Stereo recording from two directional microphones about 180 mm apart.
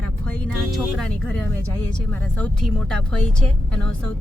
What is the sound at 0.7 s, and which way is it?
Speech, 5° left (ahead or behind).